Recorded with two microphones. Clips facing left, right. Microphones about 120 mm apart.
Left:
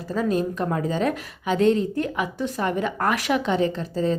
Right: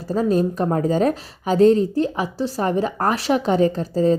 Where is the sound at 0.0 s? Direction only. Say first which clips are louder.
Right 4 dB; 35° right (ahead or behind).